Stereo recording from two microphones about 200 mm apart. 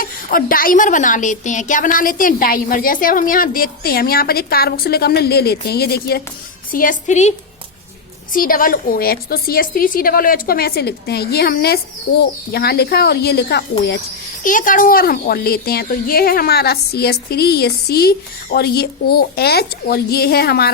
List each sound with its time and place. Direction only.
0.0 s a woman's voice: 45° left (ahead or behind)
14.4 s a woman's voice: 40° left (ahead or behind)